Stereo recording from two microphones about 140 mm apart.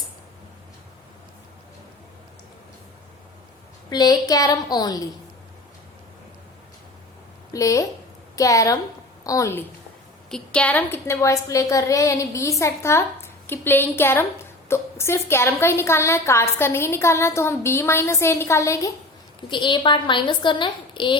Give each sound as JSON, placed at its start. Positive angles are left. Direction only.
{"t": 3.8, "sound": "a woman's voice", "side_deg": 30}
{"t": 7.5, "sound": "a woman's voice", "side_deg": 25}
{"t": 10.2, "sound": "a woman's voice", "side_deg": 5}
{"t": 19.4, "sound": "a woman's voice", "side_deg": 35}